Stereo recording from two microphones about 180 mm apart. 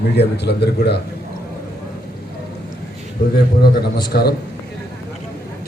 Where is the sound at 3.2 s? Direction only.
50° left (ahead or behind).